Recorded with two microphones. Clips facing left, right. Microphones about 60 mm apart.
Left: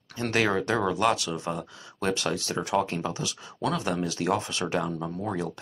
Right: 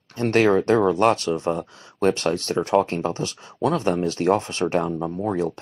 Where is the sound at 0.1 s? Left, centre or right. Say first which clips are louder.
Right 7 dB; right.